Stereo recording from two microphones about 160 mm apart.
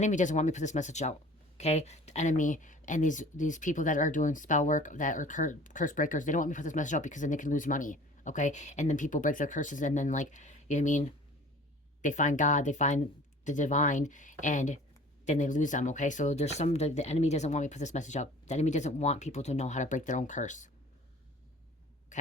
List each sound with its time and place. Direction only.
0.0 s speech: 50° left (ahead or behind)
12.0 s speech: 50° left (ahead or behind)
22.1 s a sound: 50° left (ahead or behind)